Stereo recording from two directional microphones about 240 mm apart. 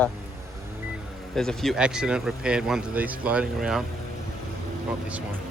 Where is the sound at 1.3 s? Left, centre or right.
Centre.